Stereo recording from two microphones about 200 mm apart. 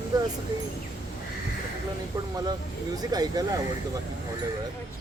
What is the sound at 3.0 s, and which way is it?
Speech, 20° right (ahead or behind).